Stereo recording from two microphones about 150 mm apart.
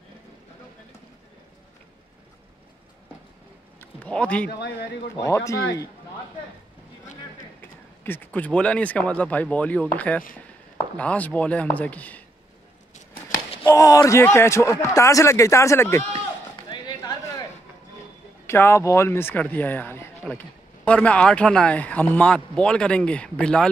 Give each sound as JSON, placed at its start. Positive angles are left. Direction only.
{"t": 3.8, "sound": "a sound", "side_deg": 10}
{"t": 5.2, "sound": "speech", "side_deg": 20}
{"t": 7.6, "sound": "speech", "side_deg": 15}
{"t": 13.7, "sound": "speech", "side_deg": 25}
{"t": 16.6, "sound": "a sound", "side_deg": 30}
{"t": 18.5, "sound": "speech", "side_deg": 15}